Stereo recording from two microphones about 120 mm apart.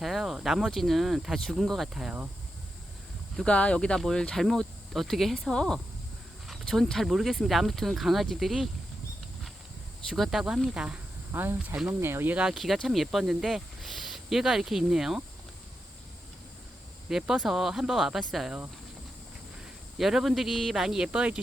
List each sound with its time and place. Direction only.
0.0 s speech: centre (ahead or behind)
3.3 s speech: 10° left (ahead or behind)
10.1 s speech: centre (ahead or behind)
11.3 s speech: 20° right (ahead or behind); by 15.2 s 5° right (ahead or behind)
17.1 s speech: centre (ahead or behind)
20.0 s speech: centre (ahead or behind)